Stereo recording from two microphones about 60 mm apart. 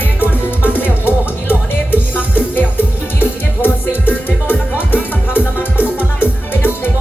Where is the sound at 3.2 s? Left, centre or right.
Left.